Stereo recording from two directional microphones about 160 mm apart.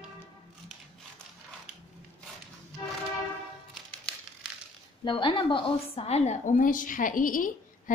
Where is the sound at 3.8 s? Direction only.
5° left (ahead or behind).